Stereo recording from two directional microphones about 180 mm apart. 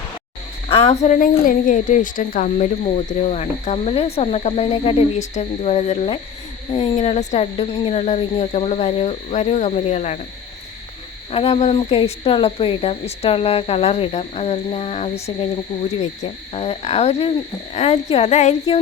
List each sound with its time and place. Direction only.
0.7 s a woman's voice: 40° left (ahead or behind)
11.3 s a woman's voice: 35° left (ahead or behind)